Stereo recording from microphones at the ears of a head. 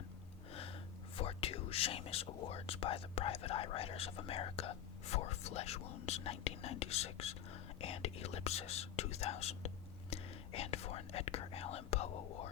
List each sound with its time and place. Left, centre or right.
1.1 s speech: left